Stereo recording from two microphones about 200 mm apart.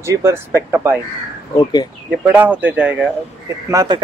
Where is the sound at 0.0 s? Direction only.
15° right (ahead or behind).